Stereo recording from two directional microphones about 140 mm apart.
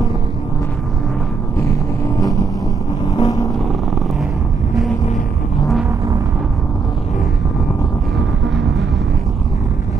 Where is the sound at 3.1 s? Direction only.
30° left (ahead or behind).